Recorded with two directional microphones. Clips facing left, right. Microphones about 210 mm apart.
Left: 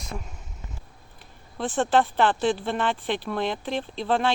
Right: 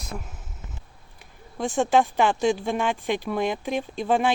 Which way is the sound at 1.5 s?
10° right (ahead or behind).